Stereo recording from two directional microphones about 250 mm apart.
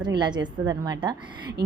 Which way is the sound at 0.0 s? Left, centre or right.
Centre.